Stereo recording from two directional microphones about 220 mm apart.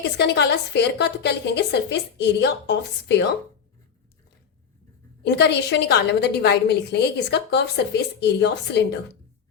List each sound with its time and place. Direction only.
0.2 s a woman's voice: 50° left (ahead or behind)
5.2 s a woman's voice: 50° left (ahead or behind)